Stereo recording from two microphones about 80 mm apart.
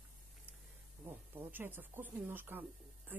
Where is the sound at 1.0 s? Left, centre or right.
Right.